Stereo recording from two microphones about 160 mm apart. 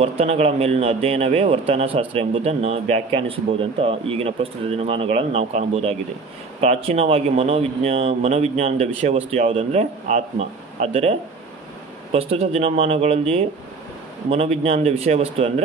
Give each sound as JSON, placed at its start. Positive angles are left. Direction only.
{"t": 0.2, "sound": "speech", "side_deg": -40}
{"t": 14.3, "sound": "speech", "side_deg": -40}